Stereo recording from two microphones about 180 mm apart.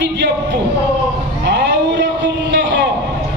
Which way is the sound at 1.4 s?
75° right (ahead or behind).